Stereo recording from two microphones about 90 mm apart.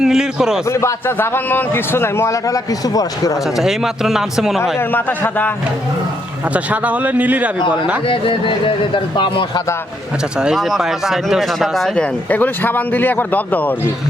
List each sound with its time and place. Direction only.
0.0 s a man's voice: 5° right (ahead or behind)
0.7 s a man's voice: 30° left (ahead or behind)
3.6 s speech: 5° right (ahead or behind)
4.8 s a man's voice: 20° left (ahead or behind)
6.5 s a man's voice: 15° right (ahead or behind)
8.0 s speech: 75° left (ahead or behind)
10.3 s speech: 5° right (ahead or behind)
11.9 s a man's voice: 20° left (ahead or behind)